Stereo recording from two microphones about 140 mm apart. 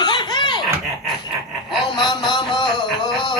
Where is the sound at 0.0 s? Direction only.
30° left (ahead or behind).